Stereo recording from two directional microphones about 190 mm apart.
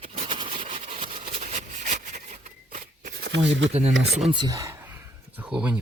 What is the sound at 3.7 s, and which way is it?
Speech, 35° right (ahead or behind).